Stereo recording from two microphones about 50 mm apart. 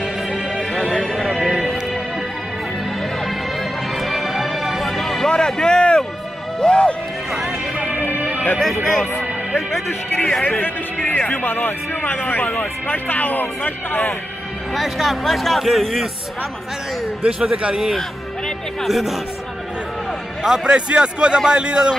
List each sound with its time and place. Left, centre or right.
1.0 s music: centre
4.0 s music: centre
5.3 s a sound: centre
6.6 s music: left
8.5 s speech: centre
11.1 s speech: left
14.7 s speech: centre
17.3 s a man's voice: centre
18.8 s speech: centre
20.4 s a man's voice: centre